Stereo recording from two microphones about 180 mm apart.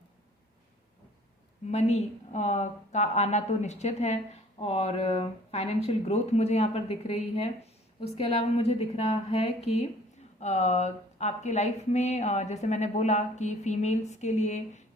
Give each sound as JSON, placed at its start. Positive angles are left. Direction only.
{"t": 1.6, "sound": "speech", "side_deg": 40}